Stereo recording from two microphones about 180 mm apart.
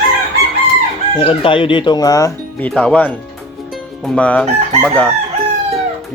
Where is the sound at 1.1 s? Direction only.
30° left (ahead or behind).